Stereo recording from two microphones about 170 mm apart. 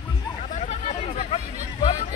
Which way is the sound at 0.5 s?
40° left (ahead or behind).